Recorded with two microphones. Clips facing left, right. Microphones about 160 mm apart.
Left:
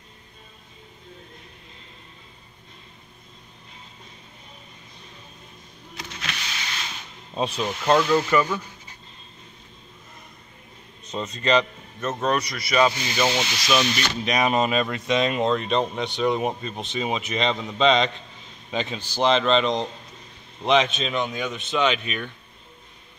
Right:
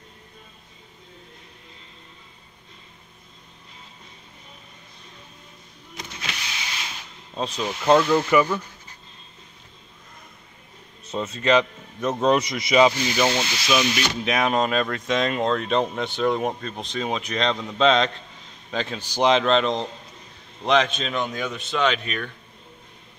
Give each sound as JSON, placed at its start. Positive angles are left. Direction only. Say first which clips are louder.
{"t": 7.3, "sound": "speech", "louder": "left 2 dB", "side_deg": 10}
{"t": 11.1, "sound": "a man's voice", "louder": "right 2 dB", "side_deg": -5}
{"t": 13.1, "sound": "speech", "louder": "right 1 dB", "side_deg": 0}
{"t": 19.0, "sound": "speech", "louder": "right 1 dB", "side_deg": -15}